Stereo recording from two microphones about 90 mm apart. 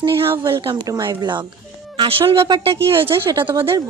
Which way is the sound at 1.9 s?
90° right.